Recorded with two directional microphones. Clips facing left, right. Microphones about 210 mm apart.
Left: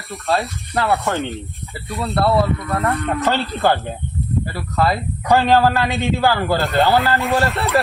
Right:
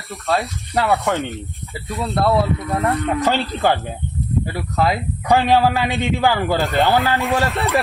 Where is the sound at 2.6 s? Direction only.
10° right (ahead or behind).